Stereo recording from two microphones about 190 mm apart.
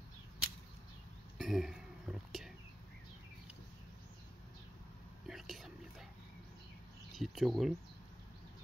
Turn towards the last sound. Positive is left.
turn(degrees=0)  # may be behind; listen again after turning